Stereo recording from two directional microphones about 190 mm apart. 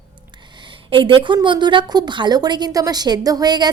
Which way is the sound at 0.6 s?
25° right (ahead or behind).